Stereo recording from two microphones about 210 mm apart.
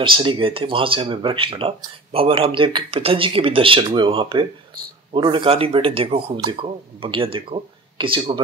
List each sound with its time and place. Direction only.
0.0 s speech: 25° right (ahead or behind)